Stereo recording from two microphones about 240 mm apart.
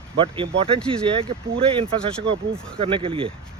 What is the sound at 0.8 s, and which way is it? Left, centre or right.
Speech, right.